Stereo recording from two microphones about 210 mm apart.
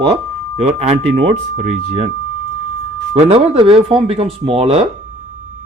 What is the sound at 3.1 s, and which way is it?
Speech, 30° right (ahead or behind).